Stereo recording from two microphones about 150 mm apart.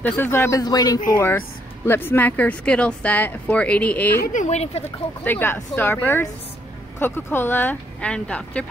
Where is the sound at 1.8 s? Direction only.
15° left (ahead or behind).